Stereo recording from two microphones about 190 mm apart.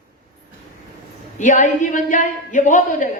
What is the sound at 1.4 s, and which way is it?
A man's voice, 40° left (ahead or behind).